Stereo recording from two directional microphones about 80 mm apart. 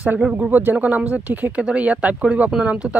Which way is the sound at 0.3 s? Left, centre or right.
Centre.